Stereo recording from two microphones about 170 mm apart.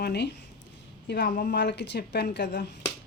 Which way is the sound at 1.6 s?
90° left.